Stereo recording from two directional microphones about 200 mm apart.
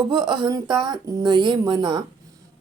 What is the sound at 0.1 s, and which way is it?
Speech, 20° right (ahead or behind).